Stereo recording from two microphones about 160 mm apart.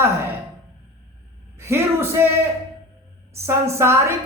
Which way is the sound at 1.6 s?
15° right (ahead or behind).